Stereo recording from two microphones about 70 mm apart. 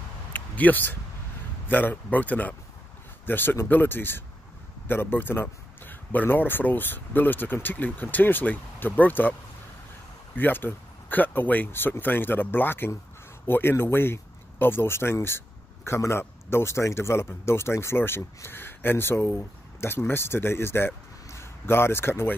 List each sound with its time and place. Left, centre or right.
0.3 s a sound: left
1.7 s speech: left
10.3 s speech: left